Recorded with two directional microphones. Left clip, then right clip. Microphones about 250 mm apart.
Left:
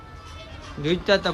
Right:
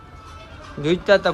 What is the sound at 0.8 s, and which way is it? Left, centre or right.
Speech, centre.